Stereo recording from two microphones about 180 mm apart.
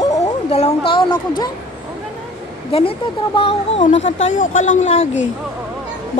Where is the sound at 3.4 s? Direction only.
30° left (ahead or behind).